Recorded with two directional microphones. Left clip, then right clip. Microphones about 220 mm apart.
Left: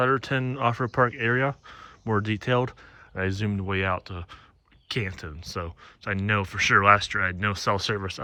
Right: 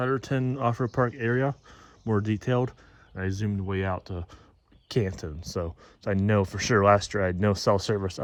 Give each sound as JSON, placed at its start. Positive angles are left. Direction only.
{"t": 0.0, "sound": "speech", "side_deg": -15}